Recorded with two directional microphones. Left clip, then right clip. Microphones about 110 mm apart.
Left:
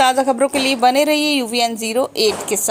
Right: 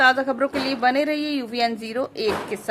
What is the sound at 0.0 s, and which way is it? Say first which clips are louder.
Speech: left 4 dB; 40° left (ahead or behind).